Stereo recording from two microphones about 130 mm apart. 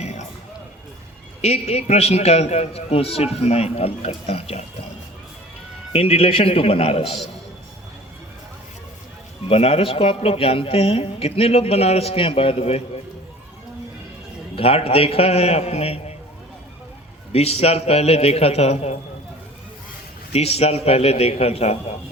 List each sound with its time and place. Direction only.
0.0 s a sound: 60° left (ahead or behind)
1.4 s a man's voice: 55° left (ahead or behind)
5.9 s a man's voice: 50° left (ahead or behind)
9.5 s a man's voice: 50° left (ahead or behind)
14.5 s a man's voice: 45° left (ahead or behind)
17.3 s a man's voice: 55° left (ahead or behind)
20.3 s a man's voice: 55° left (ahead or behind)